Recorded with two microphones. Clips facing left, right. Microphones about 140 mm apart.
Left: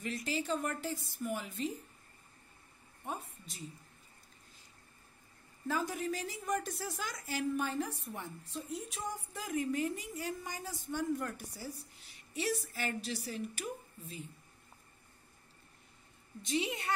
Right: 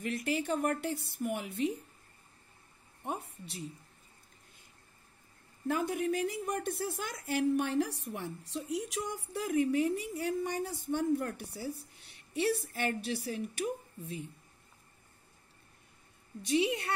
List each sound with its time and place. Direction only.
0.0 s a woman's voice: 55° right (ahead or behind)
3.1 s a woman's voice: 65° right (ahead or behind)
5.7 s a woman's voice: 60° right (ahead or behind)